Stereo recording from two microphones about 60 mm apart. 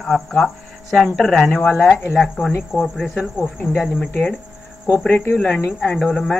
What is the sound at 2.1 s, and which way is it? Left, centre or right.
Speech, centre.